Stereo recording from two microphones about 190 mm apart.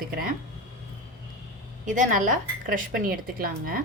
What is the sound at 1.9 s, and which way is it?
A woman's voice, 40° right (ahead or behind).